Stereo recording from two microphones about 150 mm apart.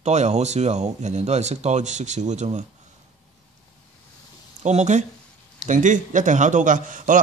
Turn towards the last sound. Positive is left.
turn(degrees=-60)  # may be behind; listen again after turning